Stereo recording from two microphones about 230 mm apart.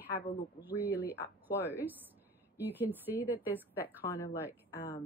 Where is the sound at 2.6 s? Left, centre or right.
Centre.